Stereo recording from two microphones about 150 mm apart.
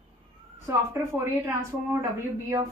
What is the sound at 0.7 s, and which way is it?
A woman's voice, 15° right (ahead or behind).